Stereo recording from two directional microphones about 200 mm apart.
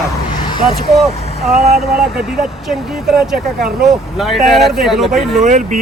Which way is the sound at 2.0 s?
Centre (ahead or behind).